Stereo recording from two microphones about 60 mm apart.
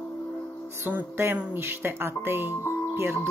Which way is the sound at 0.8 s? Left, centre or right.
Right.